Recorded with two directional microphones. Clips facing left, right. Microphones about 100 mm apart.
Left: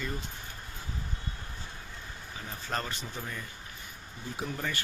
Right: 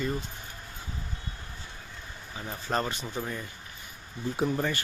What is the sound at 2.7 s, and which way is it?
Speech, 20° right (ahead or behind).